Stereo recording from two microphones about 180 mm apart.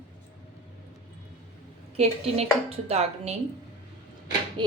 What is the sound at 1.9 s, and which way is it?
A woman's voice, 35° right (ahead or behind).